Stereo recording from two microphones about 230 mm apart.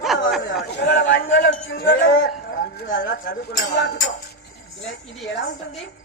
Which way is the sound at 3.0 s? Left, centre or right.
Left.